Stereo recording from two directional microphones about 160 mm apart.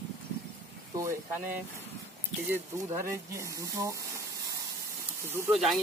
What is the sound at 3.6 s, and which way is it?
Speech, 20° right (ahead or behind).